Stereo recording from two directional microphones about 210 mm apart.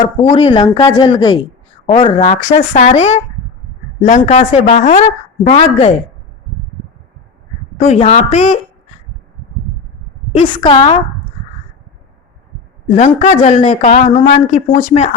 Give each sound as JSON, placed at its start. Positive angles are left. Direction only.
{"t": 0.0, "sound": "speech", "side_deg": 35}
{"t": 7.8, "sound": "speech", "side_deg": 35}
{"t": 10.3, "sound": "speech", "side_deg": 25}
{"t": 12.9, "sound": "speech", "side_deg": 35}